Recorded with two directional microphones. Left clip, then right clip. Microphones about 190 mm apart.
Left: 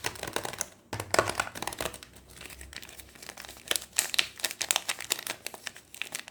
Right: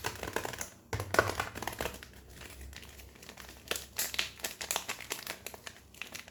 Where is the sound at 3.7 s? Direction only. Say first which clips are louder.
Left 7 dB; 10° left (ahead or behind).